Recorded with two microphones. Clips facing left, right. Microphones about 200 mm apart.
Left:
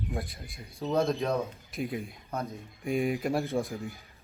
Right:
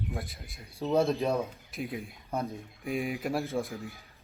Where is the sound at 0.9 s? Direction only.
30° right (ahead or behind).